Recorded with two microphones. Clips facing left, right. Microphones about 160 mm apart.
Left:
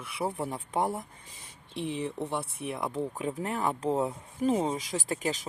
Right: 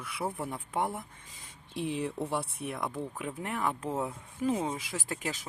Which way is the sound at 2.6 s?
30° left (ahead or behind).